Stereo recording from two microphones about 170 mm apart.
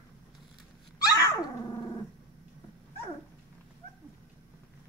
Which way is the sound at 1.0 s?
20° left (ahead or behind).